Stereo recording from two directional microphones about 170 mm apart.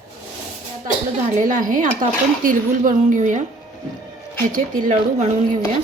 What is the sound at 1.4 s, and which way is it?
Speech, 50° right (ahead or behind).